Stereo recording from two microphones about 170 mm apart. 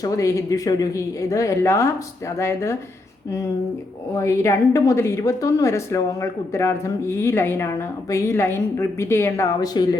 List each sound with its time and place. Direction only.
0.0 s a woman's voice: 15° left (ahead or behind)
4.1 s a woman's voice: 15° left (ahead or behind)